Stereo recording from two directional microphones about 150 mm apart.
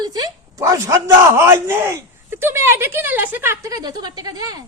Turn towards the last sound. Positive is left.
turn(degrees=-25)  # may be behind; listen again after turning